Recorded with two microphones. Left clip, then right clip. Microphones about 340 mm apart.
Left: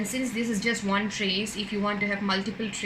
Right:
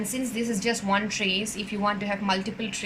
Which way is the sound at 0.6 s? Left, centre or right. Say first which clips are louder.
Right 2 dB; right.